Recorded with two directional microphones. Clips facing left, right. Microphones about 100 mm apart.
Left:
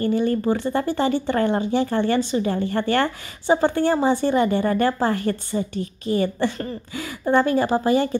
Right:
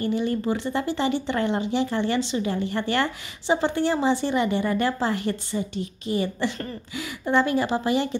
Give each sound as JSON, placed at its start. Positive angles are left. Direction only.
{"t": 0.0, "sound": "a woman's voice", "side_deg": 50}